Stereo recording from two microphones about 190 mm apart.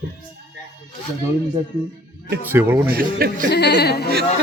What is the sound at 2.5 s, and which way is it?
Speech, 10° right (ahead or behind).